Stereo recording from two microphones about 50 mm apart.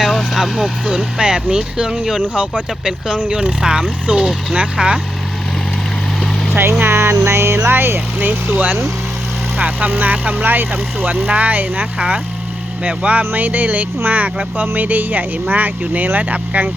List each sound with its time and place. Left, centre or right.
0.0 s vehicle: centre
0.3 s speech: centre
0.9 s speech: centre
2.3 s speech: right
6.8 s a sound: right
7.3 s a sound: right
7.7 s speech: right
11.9 s speech: centre